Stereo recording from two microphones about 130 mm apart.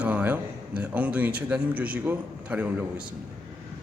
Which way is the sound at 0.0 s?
10° right (ahead or behind).